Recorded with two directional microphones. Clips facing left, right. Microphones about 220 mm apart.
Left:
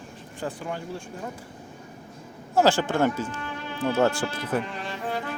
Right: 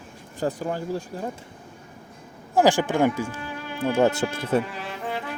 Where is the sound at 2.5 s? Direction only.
15° right (ahead or behind).